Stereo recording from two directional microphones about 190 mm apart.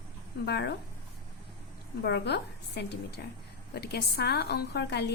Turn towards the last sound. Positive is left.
turn(degrees=60)  # may be behind; listen again after turning